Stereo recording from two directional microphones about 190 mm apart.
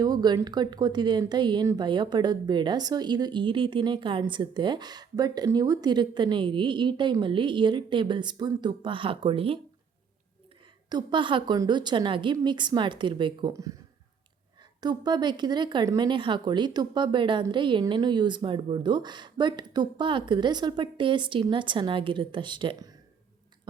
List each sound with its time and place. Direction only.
0.0 s speech: 20° right (ahead or behind)
10.8 s speech: 25° right (ahead or behind)
14.8 s speech: 20° right (ahead or behind)